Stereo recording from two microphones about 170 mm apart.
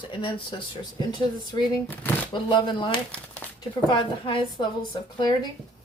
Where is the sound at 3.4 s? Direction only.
10° left (ahead or behind).